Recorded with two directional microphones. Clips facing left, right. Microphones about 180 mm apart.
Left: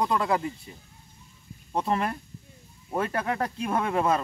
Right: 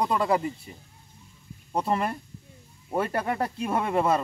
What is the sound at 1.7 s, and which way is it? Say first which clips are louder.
Speech: even; 5° right (ahead or behind).